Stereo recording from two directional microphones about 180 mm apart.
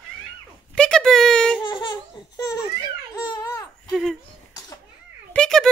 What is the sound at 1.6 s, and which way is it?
Laughter, 25° left (ahead or behind).